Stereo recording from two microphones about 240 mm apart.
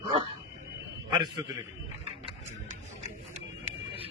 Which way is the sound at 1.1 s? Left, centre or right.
Centre.